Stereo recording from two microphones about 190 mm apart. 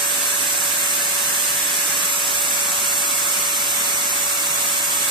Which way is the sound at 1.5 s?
Centre (ahead or behind).